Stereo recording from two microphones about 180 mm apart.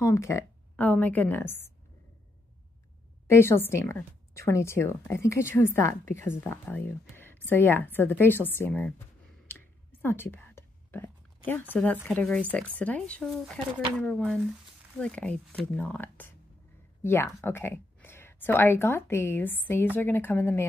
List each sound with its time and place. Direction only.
0.0 s a woman's voice: 15° left (ahead or behind)
3.3 s a woman's voice: 15° left (ahead or behind)
9.5 s a sound: 10° left (ahead or behind)
10.0 s whispering: 10° left (ahead or behind)
11.7 s a woman's voice: 10° left (ahead or behind)